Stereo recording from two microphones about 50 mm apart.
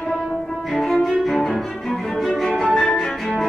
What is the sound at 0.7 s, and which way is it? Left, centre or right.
Cello, centre.